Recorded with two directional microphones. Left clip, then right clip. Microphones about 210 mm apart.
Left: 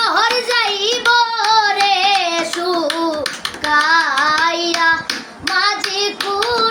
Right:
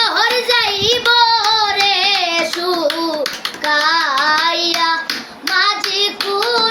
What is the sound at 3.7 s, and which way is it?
Child singing, centre (ahead or behind).